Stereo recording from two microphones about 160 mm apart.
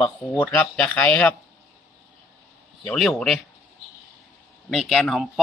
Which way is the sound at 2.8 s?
5° left (ahead or behind).